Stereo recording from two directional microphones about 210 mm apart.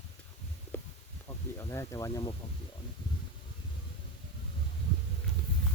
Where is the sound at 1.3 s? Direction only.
15° left (ahead or behind).